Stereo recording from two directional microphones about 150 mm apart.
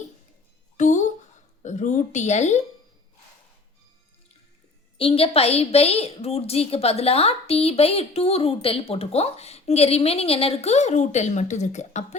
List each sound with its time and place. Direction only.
0.8 s a sound: 55° left (ahead or behind)
1.6 s a woman's voice: 55° left (ahead or behind)
4.9 s a woman's voice: 40° left (ahead or behind)